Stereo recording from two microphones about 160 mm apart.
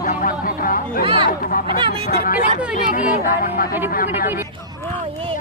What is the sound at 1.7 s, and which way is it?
Speech, 30° right (ahead or behind).